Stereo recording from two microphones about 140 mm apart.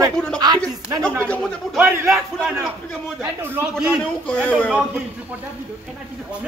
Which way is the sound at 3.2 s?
15° right (ahead or behind).